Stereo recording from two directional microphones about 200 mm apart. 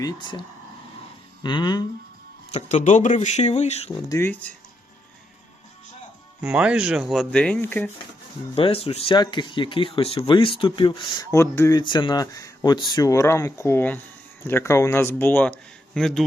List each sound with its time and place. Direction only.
0.0 s speech: 25° left (ahead or behind)
2.5 s speech: 35° left (ahead or behind)
3.9 s speech: 15° left (ahead or behind)
6.4 s speech: 5° right (ahead or behind)
8.5 s speech: 30° left (ahead or behind); by 16.2 s centre (ahead or behind)